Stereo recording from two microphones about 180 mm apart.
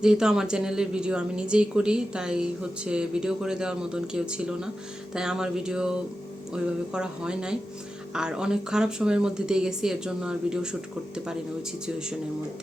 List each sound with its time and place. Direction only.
0.0 s speech: 5° right (ahead or behind)